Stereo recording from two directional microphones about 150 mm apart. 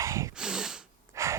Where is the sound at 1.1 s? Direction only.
20° right (ahead or behind).